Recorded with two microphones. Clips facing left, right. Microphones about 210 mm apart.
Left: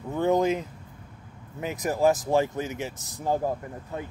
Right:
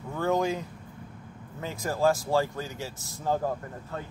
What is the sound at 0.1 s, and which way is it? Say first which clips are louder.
Speech: left 4 dB; 20° left (ahead or behind).